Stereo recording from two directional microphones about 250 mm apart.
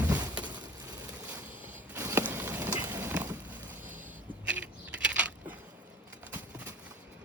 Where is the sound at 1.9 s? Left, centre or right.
Centre.